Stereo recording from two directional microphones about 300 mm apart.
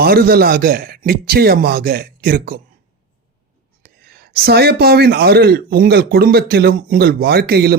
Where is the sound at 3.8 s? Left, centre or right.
Right.